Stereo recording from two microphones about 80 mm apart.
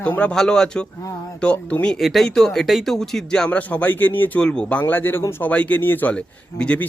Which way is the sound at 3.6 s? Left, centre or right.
Centre.